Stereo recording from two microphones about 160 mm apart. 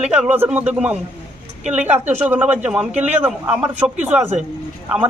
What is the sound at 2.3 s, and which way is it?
Speech, 10° right (ahead or behind).